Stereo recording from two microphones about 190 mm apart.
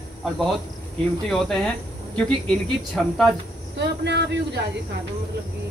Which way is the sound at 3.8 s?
65° right (ahead or behind).